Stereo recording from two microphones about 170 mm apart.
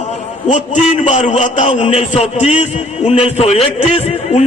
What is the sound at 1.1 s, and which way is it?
A man's voice, 30° left (ahead or behind).